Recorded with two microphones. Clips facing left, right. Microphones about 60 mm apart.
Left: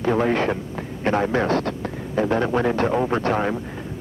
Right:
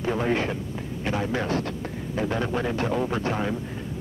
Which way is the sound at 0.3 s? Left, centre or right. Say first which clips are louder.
Left 4 dB; left.